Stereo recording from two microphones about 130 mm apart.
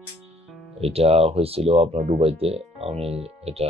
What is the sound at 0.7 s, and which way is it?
Speech, 50° right (ahead or behind).